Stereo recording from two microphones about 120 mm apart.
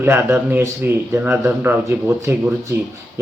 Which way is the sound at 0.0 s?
20° right (ahead or behind).